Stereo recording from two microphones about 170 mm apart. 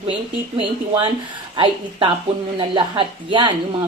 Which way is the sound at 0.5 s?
30° right (ahead or behind).